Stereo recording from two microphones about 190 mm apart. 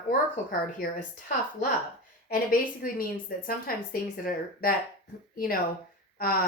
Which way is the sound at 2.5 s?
50° left (ahead or behind).